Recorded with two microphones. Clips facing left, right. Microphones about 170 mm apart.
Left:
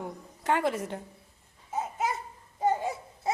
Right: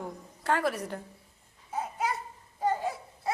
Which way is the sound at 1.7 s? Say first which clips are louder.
Left 1 dB; 20° left (ahead or behind).